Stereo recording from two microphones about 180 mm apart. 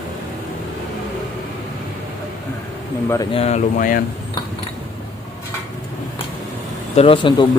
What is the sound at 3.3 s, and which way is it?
Speech, 35° left (ahead or behind).